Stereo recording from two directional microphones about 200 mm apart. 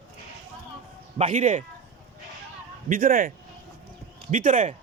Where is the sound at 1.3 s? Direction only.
40° right (ahead or behind).